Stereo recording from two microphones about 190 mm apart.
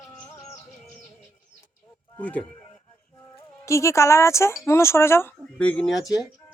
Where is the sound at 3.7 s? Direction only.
15° left (ahead or behind).